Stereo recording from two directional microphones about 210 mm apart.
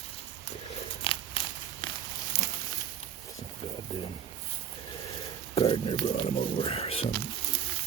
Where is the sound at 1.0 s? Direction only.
25° left (ahead or behind).